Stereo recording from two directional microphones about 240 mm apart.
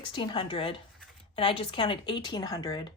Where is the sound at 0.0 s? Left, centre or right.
Left.